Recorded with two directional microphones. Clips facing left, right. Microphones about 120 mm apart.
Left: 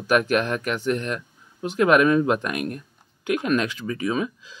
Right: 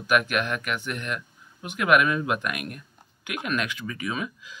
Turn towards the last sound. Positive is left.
turn(degrees=35)  # may be behind; listen again after turning